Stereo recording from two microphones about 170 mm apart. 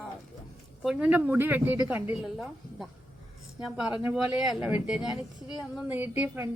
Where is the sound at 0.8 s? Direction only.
5° right (ahead or behind).